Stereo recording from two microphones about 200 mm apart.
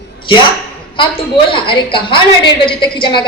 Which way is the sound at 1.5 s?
25° left (ahead or behind).